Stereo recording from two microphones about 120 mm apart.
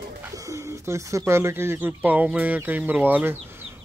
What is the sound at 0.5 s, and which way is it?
Speech, 25° right (ahead or behind).